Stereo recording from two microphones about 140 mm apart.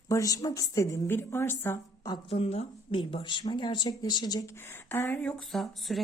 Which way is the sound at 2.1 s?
45° left (ahead or behind).